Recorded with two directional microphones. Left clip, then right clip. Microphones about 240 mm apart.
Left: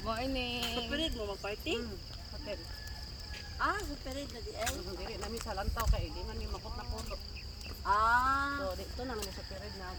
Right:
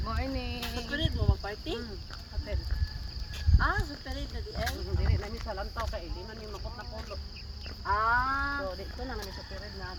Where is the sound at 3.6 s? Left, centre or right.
Centre.